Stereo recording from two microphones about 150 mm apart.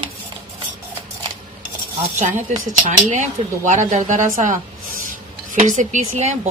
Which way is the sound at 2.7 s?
55° right (ahead or behind).